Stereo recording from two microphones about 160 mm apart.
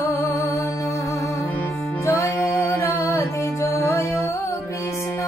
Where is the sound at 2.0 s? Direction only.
20° left (ahead or behind).